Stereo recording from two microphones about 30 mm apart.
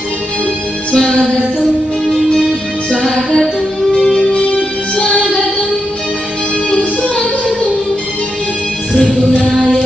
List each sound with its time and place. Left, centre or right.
0.9 s music: left
2.9 s music: left